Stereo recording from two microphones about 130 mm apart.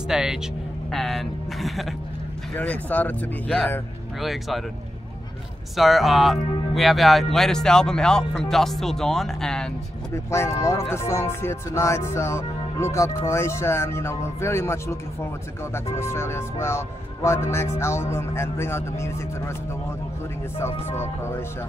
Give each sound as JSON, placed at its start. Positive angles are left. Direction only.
{"t": 0.1, "sound": "speech", "side_deg": -5}
{"t": 2.5, "sound": "speech", "side_deg": 10}
{"t": 5.8, "sound": "speech", "side_deg": 0}
{"t": 10.1, "sound": "speech", "side_deg": 20}